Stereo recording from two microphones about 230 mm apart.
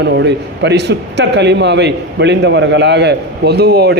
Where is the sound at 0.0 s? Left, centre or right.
Right.